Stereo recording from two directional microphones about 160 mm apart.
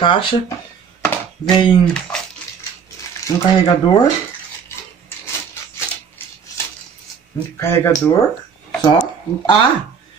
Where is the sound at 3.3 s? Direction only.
25° left (ahead or behind).